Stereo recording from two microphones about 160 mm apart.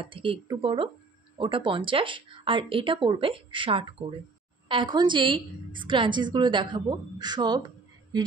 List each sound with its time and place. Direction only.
0.0 s a woman's voice: 35° right (ahead or behind)